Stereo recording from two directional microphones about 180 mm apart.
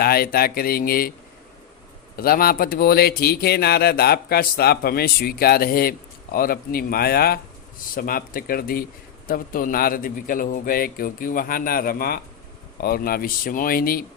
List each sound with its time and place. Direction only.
0.0 s a man's voice: 55° left (ahead or behind)
2.1 s a man's voice: 55° left (ahead or behind)